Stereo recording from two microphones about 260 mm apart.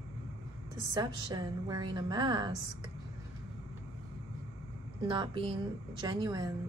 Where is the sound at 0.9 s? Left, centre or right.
Centre.